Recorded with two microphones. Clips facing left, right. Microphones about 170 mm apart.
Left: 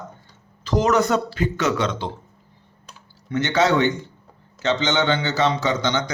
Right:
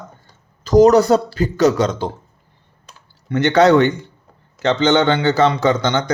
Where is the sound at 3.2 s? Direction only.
60° right (ahead or behind).